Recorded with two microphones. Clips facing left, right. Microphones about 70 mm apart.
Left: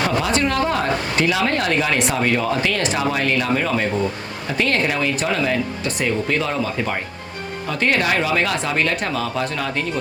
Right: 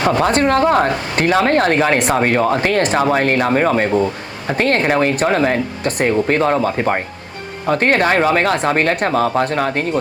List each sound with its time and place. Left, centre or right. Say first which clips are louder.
0.2 s speech: right 6 dB; right